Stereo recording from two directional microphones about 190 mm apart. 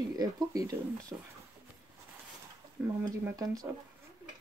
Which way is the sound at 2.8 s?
5° right (ahead or behind).